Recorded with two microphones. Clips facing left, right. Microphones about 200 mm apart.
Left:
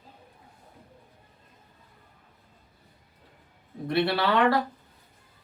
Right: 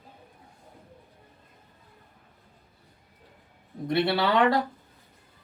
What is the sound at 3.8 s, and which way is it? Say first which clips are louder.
Speech: right 1 dB; 20° right (ahead or behind).